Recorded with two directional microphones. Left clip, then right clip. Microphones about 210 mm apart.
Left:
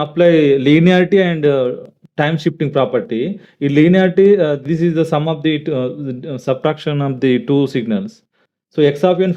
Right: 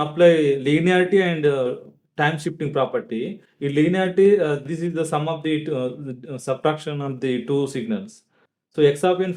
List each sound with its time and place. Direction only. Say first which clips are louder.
0.0 s speech: left 4 dB; 35° left (ahead or behind)